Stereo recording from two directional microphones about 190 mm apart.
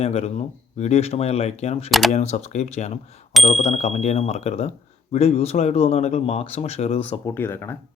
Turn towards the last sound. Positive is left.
turn(degrees=10)  # may be behind; listen again after turning